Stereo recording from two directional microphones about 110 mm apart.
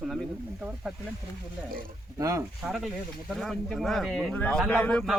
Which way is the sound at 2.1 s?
30° right (ahead or behind).